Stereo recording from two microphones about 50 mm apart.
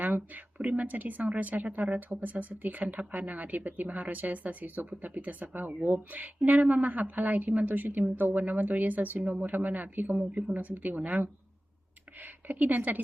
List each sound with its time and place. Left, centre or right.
0.0 s speech: right
12.6 s speech: right